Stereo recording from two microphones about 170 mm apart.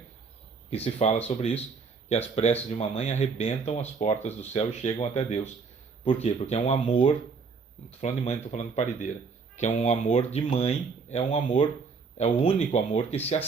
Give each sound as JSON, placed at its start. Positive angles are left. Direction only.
{"t": 0.7, "sound": "speech", "side_deg": 35}